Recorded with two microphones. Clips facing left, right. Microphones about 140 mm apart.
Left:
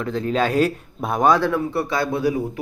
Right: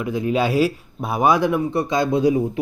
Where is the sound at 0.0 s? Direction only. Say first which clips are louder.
Right 1 dB; 10° right (ahead or behind).